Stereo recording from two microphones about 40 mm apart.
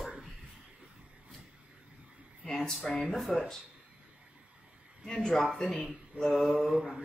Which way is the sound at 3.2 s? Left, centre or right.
Centre.